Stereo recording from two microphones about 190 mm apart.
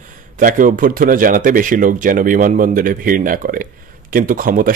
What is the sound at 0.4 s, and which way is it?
Speech, 45° right (ahead or behind).